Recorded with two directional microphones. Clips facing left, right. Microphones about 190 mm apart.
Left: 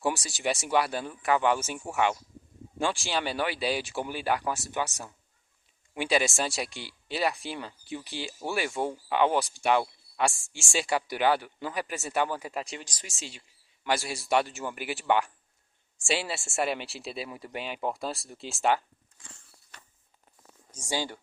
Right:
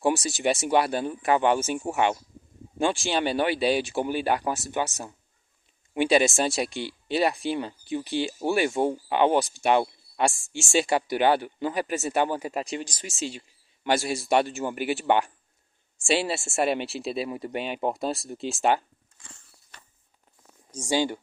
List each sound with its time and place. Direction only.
0.0 s speech: 20° right (ahead or behind)
20.9 s speech: 20° right (ahead or behind)